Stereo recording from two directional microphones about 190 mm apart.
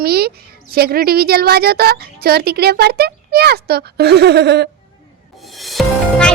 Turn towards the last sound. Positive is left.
turn(degrees=0)  # may be behind; listen again after turning